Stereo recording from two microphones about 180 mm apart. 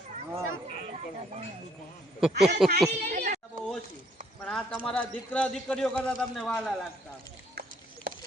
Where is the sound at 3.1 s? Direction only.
45° right (ahead or behind).